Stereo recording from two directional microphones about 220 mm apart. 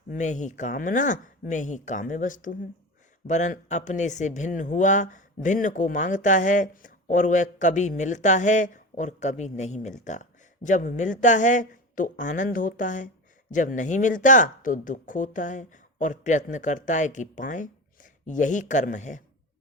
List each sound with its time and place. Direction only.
0.1 s speech: 35° left (ahead or behind)